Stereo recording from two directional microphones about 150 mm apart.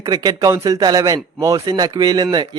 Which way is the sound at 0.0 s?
25° right (ahead or behind).